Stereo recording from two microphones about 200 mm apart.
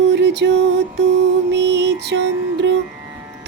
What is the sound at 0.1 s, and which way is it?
Music, 60° right (ahead or behind).